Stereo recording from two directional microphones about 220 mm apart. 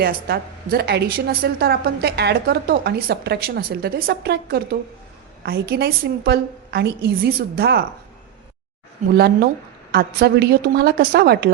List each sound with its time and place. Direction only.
0.0 s a woman's voice: 45° right (ahead or behind)
9.1 s a woman's voice: 45° right (ahead or behind)